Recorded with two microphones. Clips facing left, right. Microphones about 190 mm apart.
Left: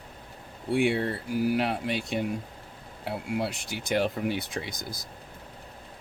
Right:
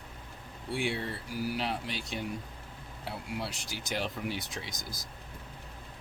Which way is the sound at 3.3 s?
55° left (ahead or behind).